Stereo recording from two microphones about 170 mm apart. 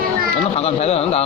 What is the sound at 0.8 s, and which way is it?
Speech, 40° left (ahead or behind).